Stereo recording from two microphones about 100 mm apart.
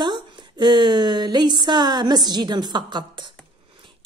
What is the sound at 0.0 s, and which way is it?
A woman's voice, 50° right (ahead or behind).